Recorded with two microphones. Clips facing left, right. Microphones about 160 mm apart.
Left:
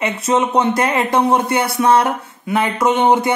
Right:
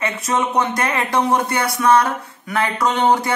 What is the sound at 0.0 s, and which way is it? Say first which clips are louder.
Speech: left 4 dB; 25° left (ahead or behind).